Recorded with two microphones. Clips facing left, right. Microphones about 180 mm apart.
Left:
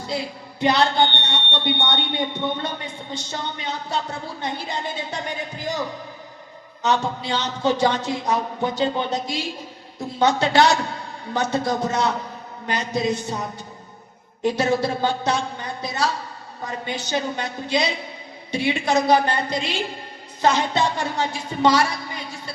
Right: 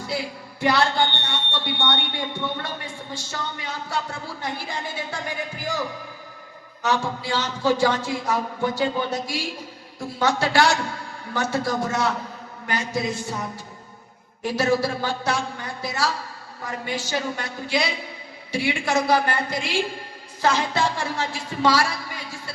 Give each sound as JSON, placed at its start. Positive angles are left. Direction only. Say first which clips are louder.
{"t": 0.1, "sound": "a woman's voice", "louder": "left 2 dB", "side_deg": 20}
{"t": 6.8, "sound": "a woman's voice", "louder": "left 2 dB", "side_deg": 20}